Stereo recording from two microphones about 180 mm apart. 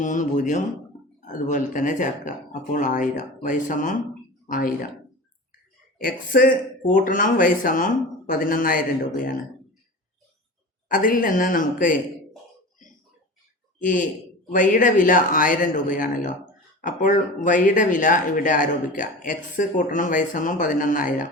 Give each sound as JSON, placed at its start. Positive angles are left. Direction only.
{"t": 0.0, "sound": "speech", "side_deg": 45}
{"t": 6.0, "sound": "speech", "side_deg": 50}
{"t": 10.8, "sound": "speech", "side_deg": 50}
{"t": 13.7, "sound": "speech", "side_deg": 45}